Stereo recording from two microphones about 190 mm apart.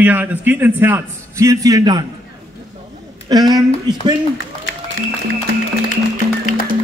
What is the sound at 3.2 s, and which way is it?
Speech, 20° right (ahead or behind).